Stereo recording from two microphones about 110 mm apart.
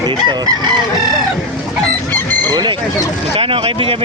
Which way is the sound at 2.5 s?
40° right (ahead or behind).